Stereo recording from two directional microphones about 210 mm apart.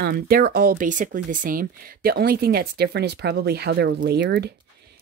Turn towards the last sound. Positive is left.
turn(degrees=-50)  # may be behind; listen again after turning